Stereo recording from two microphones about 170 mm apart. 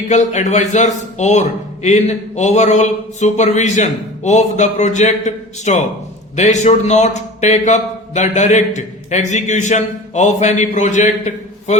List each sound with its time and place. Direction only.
0.1 s a man's voice: 45° left (ahead or behind)